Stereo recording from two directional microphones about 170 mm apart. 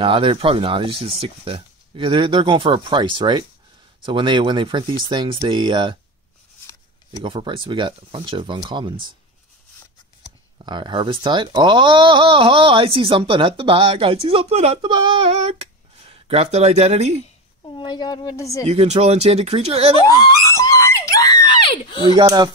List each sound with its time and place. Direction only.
0.0 s speech: 30° right (ahead or behind)
7.1 s speech: 30° right (ahead or behind)
10.6 s speech: 25° right (ahead or behind)
17.7 s speech: 25° left (ahead or behind)
18.7 s speech: 40° right (ahead or behind)
20.0 s screaming: 20° left (ahead or behind)
22.1 s speech: 25° right (ahead or behind)